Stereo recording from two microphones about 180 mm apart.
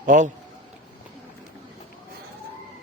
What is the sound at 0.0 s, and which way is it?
Speech, 45° right (ahead or behind).